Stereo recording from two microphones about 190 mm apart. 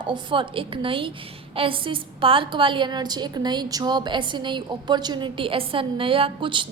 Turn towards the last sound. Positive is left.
turn(degrees=-25)  # may be behind; listen again after turning